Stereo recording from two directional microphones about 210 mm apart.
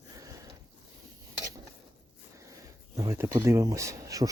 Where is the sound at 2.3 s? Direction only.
15° right (ahead or behind).